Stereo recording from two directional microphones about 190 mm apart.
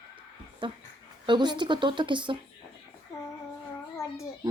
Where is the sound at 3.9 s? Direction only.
20° left (ahead or behind).